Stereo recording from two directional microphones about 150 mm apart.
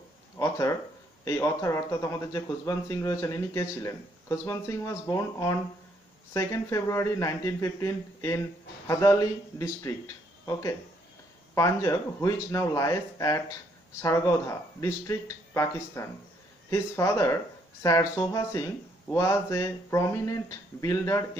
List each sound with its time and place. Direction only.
0.4 s speech: 20° left (ahead or behind)